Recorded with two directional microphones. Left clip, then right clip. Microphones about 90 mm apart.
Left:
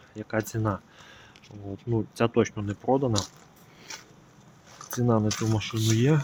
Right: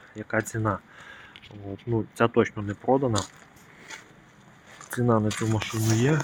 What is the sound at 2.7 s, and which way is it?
Speech, 30° left (ahead or behind).